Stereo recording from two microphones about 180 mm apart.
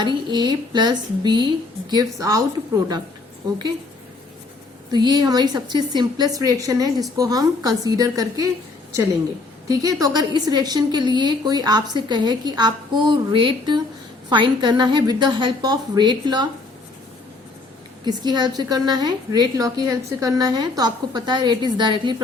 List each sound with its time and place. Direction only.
0.0 s a woman's voice: 25° right (ahead or behind)
4.9 s a woman's voice: 25° right (ahead or behind)
9.6 s a woman's voice: 20° right (ahead or behind)
18.0 s a woman's voice: 25° right (ahead or behind)